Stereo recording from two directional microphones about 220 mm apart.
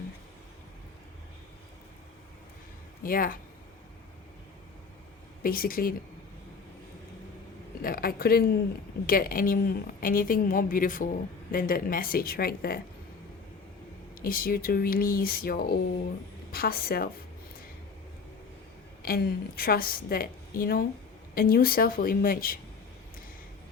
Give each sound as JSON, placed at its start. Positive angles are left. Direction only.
{"t": 3.0, "sound": "a woman's voice", "side_deg": 40}
{"t": 5.4, "sound": "a woman's voice", "side_deg": 40}
{"t": 7.8, "sound": "a woman's voice", "side_deg": 40}
{"t": 14.2, "sound": "a woman's voice", "side_deg": 40}
{"t": 19.0, "sound": "a woman's voice", "side_deg": 45}